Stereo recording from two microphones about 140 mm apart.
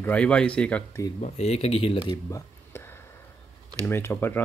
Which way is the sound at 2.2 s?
20° left (ahead or behind).